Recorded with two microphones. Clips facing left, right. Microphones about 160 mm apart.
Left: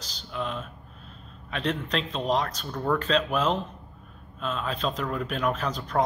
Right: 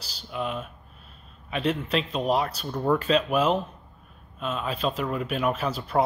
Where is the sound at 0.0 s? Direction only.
10° right (ahead or behind).